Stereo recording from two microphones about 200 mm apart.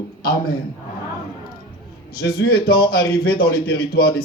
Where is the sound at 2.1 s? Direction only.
50° left (ahead or behind).